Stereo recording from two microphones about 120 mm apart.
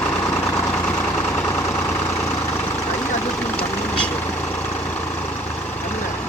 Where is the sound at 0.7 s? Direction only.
10° left (ahead or behind).